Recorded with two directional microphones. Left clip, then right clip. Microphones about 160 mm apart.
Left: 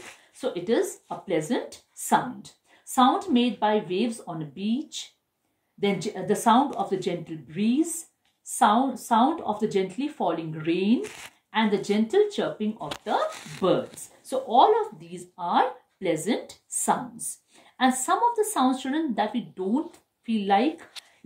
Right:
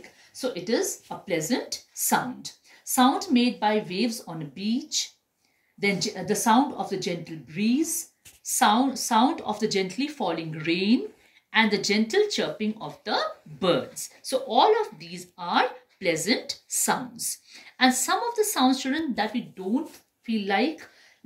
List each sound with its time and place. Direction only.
0.4 s speech: 35° left (ahead or behind)
3.3 s speech: 30° left (ahead or behind)
14.5 s speech: 45° left (ahead or behind)
15.3 s speech: 35° left (ahead or behind)
18.0 s speech: 40° left (ahead or behind)